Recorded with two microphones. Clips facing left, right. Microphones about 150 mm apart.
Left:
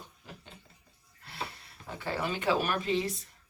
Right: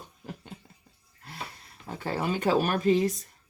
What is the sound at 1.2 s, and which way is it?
Speech, 45° right (ahead or behind).